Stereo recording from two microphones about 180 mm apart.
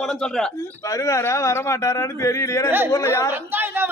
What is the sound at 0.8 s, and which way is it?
Speech, 15° left (ahead or behind).